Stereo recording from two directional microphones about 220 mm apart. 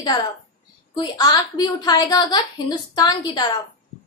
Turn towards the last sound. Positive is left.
turn(degrees=20)  # may be behind; listen again after turning